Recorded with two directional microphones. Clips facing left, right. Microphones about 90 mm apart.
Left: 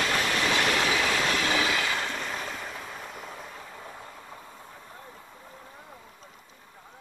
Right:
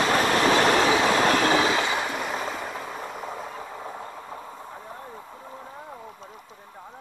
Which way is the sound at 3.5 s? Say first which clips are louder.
Right 7 dB; 35° right (ahead or behind).